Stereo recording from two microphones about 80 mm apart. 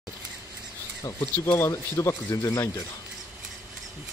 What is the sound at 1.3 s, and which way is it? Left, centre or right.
Speech, left.